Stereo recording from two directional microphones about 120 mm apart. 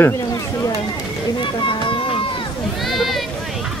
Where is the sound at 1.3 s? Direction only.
45° left (ahead or behind).